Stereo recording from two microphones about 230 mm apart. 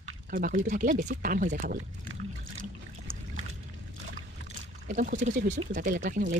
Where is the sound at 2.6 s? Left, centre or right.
Right.